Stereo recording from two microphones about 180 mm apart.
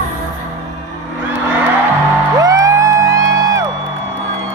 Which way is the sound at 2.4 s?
20° right (ahead or behind).